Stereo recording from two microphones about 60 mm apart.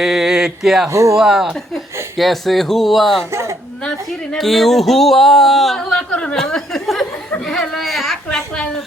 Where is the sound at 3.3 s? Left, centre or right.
Right.